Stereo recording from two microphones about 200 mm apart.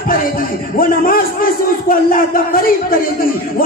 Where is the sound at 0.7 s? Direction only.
45° left (ahead or behind).